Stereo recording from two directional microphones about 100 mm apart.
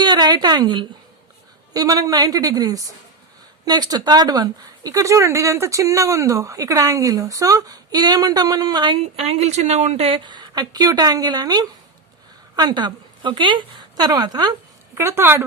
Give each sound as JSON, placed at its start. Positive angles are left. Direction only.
{"t": 0.0, "sound": "a sound", "side_deg": -45}
{"t": 1.7, "sound": "speech", "side_deg": -40}
{"t": 9.1, "sound": "speech", "side_deg": -80}
{"t": 10.2, "sound": "a woman's voice", "side_deg": -50}
{"t": 14.9, "sound": "a woman's voice", "side_deg": -25}